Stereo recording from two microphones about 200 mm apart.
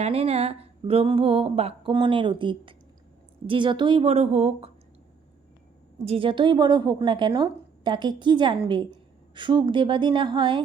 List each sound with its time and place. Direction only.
0.0 s a woman's voice: 30° right (ahead or behind)
6.1 s a woman's voice: 25° right (ahead or behind)